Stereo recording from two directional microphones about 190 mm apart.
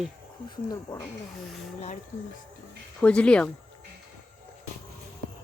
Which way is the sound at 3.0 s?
5° left (ahead or behind).